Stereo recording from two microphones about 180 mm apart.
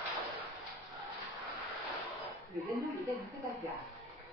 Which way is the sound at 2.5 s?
15° right (ahead or behind).